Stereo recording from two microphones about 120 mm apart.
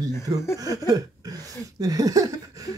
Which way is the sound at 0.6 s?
30° right (ahead or behind).